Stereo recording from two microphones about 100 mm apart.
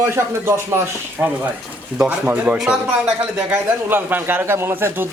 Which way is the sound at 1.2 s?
15° right (ahead or behind).